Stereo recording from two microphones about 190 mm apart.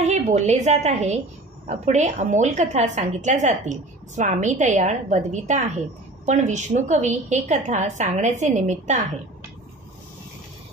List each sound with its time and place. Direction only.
0.0 s a woman's voice: 35° right (ahead or behind)